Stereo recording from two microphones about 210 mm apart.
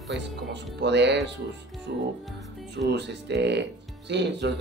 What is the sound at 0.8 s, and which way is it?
Speech, 55° right (ahead or behind).